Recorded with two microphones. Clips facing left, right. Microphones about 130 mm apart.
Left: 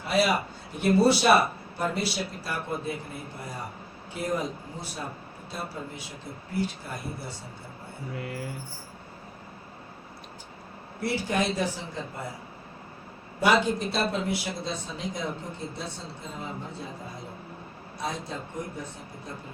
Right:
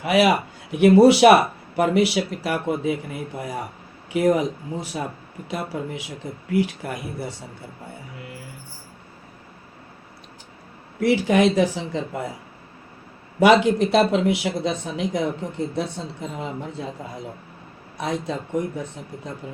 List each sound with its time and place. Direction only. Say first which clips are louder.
0.0 s speech: right 7 dB; 90° right
11.0 s speech: right 10 dB; 90° right
13.4 s speech: right 8 dB; 90° right
17.9 s speech: right 7 dB; 85° right